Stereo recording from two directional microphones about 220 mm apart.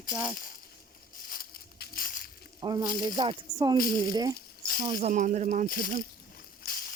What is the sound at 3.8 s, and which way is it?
Speech, 40° left (ahead or behind).